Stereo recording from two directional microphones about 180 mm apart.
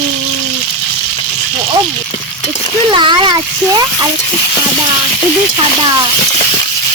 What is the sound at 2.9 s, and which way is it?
Speech, 25° right (ahead or behind).